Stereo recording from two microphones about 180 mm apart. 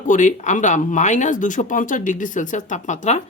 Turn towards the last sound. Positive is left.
turn(degrees=40)  # may be behind; listen again after turning